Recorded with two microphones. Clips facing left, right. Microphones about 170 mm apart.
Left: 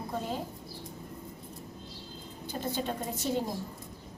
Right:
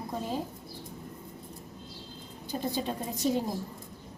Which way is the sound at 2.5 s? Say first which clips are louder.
Right 2 dB; 10° right (ahead or behind).